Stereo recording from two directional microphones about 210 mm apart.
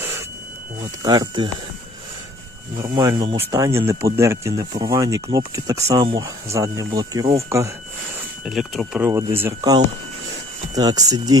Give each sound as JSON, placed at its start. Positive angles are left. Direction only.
{"t": 1.0, "sound": "speech", "side_deg": -20}
{"t": 2.8, "sound": "speech", "side_deg": -15}
{"t": 8.4, "sound": "speech", "side_deg": 0}